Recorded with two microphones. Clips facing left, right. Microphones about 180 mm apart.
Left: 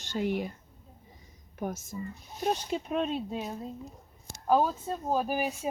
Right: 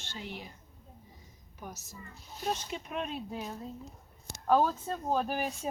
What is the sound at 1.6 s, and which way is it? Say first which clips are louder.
Speech: left 11 dB; 55° left (ahead or behind).